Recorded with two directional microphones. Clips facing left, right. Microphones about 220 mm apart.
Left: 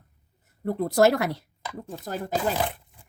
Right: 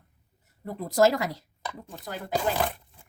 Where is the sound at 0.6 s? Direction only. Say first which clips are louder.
Left 2 dB; 65° left (ahead or behind).